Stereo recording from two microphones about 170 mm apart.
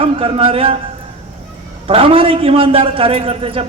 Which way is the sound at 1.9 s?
35° right (ahead or behind).